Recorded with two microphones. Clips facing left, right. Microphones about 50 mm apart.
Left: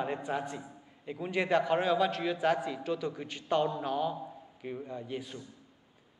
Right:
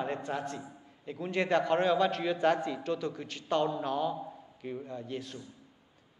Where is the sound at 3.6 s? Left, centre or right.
Centre.